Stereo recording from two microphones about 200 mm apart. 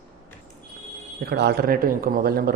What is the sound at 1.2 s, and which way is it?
Speech, 55° right (ahead or behind).